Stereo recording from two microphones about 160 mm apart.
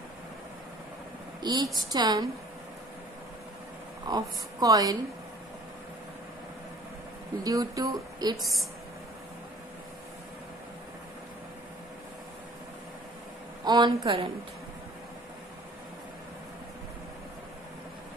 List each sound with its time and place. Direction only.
1.4 s a woman's voice: 25° right (ahead or behind)
4.1 s speech: 25° right (ahead or behind)
7.4 s speech: 20° right (ahead or behind)
8.4 s a woman's voice: centre (ahead or behind)
13.7 s speech: 25° right (ahead or behind)